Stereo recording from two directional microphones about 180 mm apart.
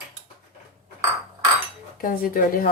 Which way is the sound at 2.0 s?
50° left (ahead or behind).